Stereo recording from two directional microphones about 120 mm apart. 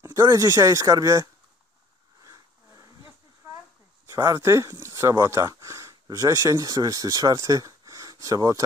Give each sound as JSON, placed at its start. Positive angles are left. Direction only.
{"t": 0.0, "sound": "speech", "side_deg": -30}
{"t": 2.2, "sound": "dog", "side_deg": -30}
{"t": 4.1, "sound": "speech", "side_deg": -25}